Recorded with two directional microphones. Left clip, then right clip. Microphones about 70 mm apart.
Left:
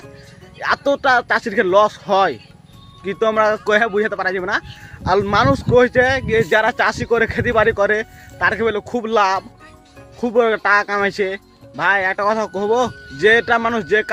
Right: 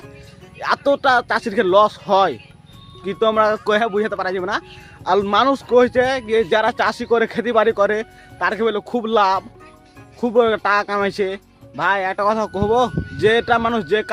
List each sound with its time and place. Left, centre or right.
0.6 s speech: right
10.2 s speech: right